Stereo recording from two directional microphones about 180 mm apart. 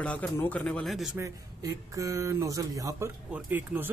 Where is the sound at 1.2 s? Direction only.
20° right (ahead or behind).